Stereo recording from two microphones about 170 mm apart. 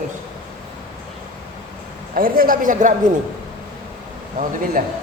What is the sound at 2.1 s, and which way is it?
Speech, 55° right (ahead or behind).